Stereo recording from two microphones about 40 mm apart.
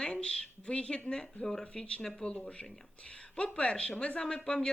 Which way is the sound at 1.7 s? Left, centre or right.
Centre.